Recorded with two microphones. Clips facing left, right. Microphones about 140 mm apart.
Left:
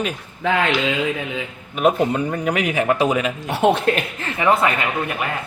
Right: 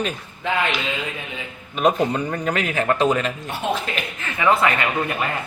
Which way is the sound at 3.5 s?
70° left (ahead or behind).